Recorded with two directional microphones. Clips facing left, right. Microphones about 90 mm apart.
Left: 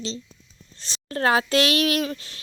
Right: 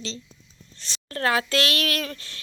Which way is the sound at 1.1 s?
25° left (ahead or behind).